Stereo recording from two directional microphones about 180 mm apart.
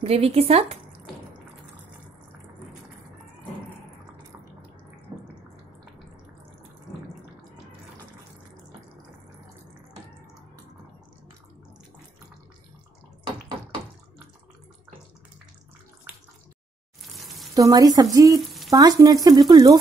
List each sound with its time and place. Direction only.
0.0 s speech: 35° right (ahead or behind)
17.0 s frying: centre (ahead or behind)
17.6 s speech: 20° right (ahead or behind)